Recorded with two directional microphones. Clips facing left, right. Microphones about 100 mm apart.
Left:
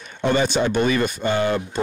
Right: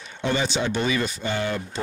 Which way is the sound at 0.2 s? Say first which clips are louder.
Left 5 dB; 55° left (ahead or behind).